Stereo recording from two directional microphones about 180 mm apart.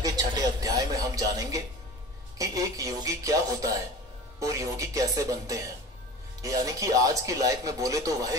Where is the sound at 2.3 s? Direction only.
20° right (ahead or behind).